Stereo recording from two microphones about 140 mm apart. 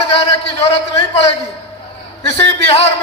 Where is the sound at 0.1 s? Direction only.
45° left (ahead or behind).